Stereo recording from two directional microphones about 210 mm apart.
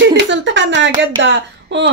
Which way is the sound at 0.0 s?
60° right (ahead or behind).